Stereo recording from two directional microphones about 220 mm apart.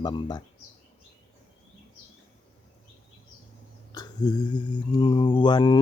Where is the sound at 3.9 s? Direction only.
20° left (ahead or behind).